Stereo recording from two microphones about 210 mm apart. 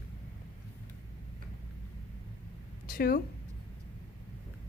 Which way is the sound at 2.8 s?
45° left (ahead or behind).